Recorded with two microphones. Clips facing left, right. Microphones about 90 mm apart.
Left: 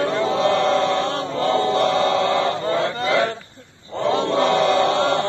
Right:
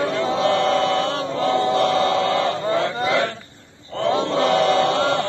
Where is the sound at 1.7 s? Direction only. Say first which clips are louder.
Even; 20° left (ahead or behind).